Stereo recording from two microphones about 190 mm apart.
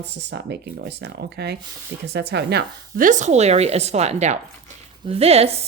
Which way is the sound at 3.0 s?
40° right (ahead or behind).